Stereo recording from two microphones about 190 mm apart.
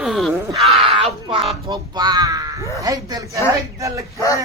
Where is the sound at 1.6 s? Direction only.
20° right (ahead or behind).